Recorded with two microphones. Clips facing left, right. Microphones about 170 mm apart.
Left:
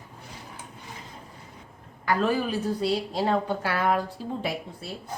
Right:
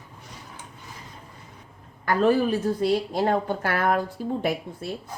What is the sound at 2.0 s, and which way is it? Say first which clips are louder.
A woman's voice: right 4 dB; 50° right (ahead or behind).